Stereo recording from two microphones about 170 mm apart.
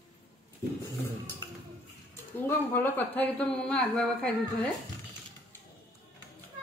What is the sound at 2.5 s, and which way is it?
Speech, 10° left (ahead or behind).